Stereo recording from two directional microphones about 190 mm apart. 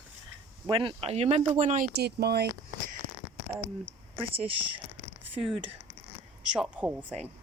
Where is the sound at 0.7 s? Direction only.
25° right (ahead or behind); by 2.5 s 60° right (ahead or behind).